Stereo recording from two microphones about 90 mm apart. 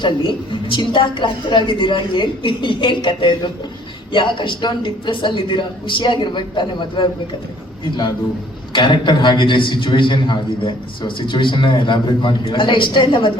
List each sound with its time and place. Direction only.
0.0 s a man's voice: 65° left (ahead or behind)